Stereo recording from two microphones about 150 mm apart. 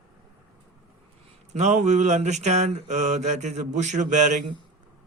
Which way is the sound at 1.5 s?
55° right (ahead or behind).